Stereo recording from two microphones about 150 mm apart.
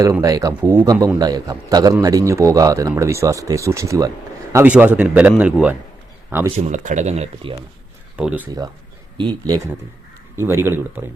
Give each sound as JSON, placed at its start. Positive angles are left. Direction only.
{"t": 0.0, "sound": "a man's voice", "side_deg": -20}
{"t": 6.6, "sound": "speech", "side_deg": -55}
{"t": 8.1, "sound": "speech", "side_deg": -10}
{"t": 8.4, "sound": "a man's voice", "side_deg": -25}